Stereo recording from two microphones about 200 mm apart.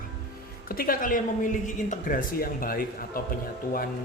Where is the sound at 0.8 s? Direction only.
45° left (ahead or behind).